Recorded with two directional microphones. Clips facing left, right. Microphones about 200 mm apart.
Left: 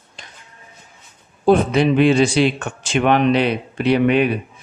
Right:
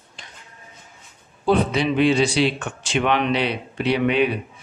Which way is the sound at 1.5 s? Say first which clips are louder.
Left 5 dB; 50° left (ahead or behind).